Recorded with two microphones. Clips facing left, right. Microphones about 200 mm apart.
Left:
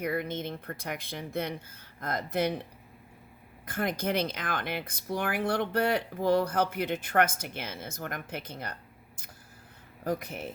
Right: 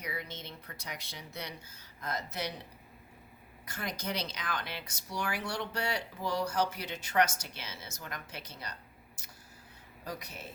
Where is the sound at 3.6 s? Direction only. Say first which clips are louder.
Left 8 dB; 55° left (ahead or behind).